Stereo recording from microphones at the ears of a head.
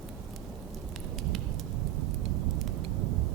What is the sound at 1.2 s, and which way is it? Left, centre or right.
Rain, right.